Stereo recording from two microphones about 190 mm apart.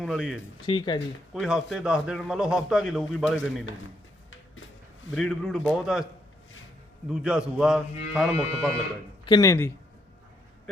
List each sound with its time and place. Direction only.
0.0 s a man's voice: 5° right (ahead or behind)
0.6 s speech: 25° left (ahead or behind)
1.3 s a man's voice: 5° right (ahead or behind)
5.1 s a man's voice: centre (ahead or behind)
7.1 s a man's voice: 5° right (ahead or behind)
9.2 s speech: 20° left (ahead or behind)